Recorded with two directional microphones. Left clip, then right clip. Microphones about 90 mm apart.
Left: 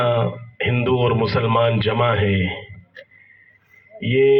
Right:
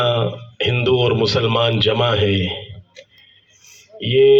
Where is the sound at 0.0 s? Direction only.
15° right (ahead or behind).